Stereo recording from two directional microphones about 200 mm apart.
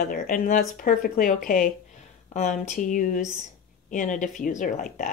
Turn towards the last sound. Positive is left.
turn(degrees=40)  # may be behind; listen again after turning